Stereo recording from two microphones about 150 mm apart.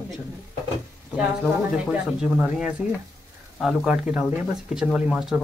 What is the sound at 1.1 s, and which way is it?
Speech, 10° right (ahead or behind).